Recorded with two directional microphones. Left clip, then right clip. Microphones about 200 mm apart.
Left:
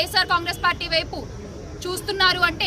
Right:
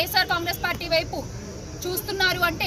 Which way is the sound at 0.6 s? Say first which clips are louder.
Even; 10° left (ahead or behind).